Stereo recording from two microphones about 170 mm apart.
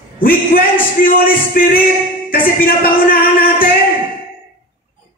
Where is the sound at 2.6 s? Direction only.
55° left (ahead or behind).